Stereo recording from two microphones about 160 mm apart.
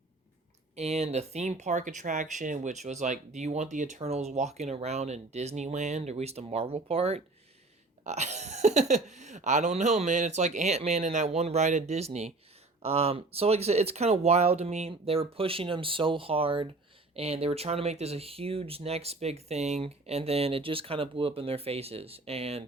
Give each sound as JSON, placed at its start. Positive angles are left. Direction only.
{"t": 0.8, "sound": "speech", "side_deg": -40}